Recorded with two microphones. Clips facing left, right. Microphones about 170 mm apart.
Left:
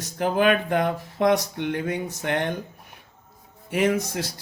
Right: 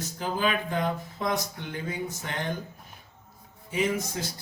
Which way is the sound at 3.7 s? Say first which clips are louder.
Left 5 dB; 65° left (ahead or behind).